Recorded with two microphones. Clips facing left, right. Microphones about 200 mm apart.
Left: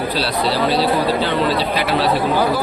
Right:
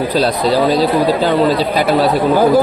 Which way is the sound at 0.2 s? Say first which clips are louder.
Right 7 dB; 45° right (ahead or behind).